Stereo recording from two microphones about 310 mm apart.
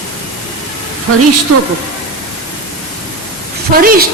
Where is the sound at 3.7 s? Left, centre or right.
Right.